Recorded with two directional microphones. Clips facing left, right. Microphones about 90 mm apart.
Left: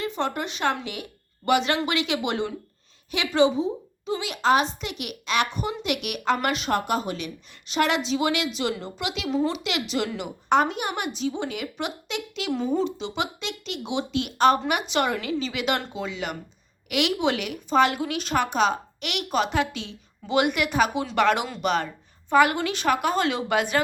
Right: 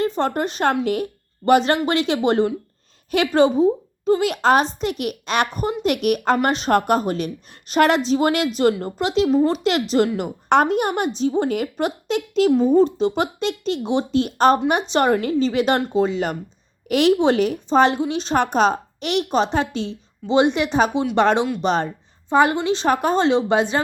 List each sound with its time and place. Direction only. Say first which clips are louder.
0.0 s a woman's voice: right 7 dB; 40° right (ahead or behind)
6.7 s a woman's voice: right 9 dB; 50° right (ahead or behind); by 18.3 s 30° right (ahead or behind)
18.3 s a woman's voice: right 5 dB; 40° right (ahead or behind)